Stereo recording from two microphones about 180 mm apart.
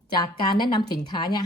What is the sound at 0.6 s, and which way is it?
Speech, 25° left (ahead or behind).